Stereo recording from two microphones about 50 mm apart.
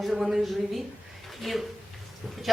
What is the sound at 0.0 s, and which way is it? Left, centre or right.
Speech, centre.